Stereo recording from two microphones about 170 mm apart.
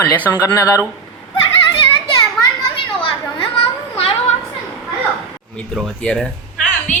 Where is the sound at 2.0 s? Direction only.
30° left (ahead or behind).